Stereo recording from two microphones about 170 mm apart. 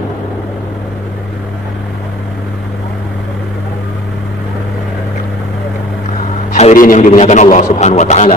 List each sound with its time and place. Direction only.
6.5 s a man's voice: 45° left (ahead or behind)